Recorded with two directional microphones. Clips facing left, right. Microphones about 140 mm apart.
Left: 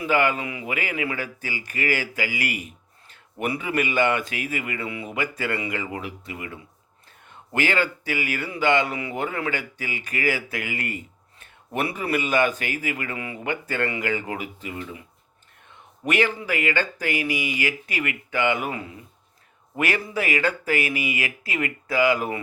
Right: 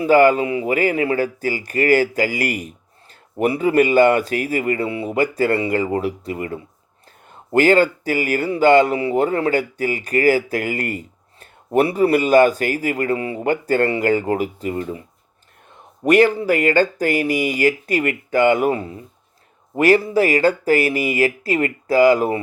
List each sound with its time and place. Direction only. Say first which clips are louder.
0.0 s speech: right 9 dB; 40° right (ahead or behind)